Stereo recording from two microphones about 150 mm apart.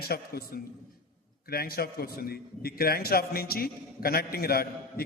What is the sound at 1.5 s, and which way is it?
A man's voice, 90° left.